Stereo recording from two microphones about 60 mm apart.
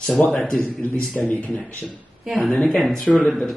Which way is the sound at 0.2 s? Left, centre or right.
Left.